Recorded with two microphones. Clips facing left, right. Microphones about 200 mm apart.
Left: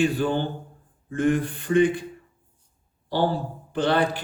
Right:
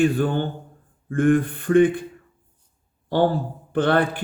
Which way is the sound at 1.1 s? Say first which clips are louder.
Right 4 dB; 55° right (ahead or behind).